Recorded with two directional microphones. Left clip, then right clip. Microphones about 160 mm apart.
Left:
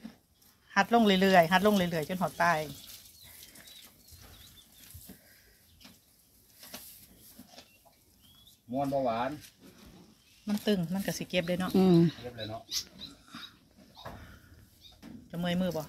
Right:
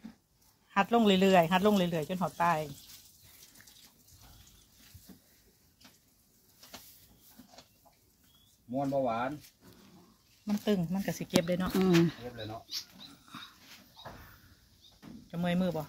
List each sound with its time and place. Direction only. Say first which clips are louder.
0.7 s speech: left 2 dB; 10° right (ahead or behind)
8.7 s speech: left 1 dB; 5° right (ahead or behind)
10.4 s speech: left 1 dB; 10° right (ahead or behind)
13.2 s dog: left 1 dB; 10° right (ahead or behind)
15.3 s speech: even; 15° right (ahead or behind)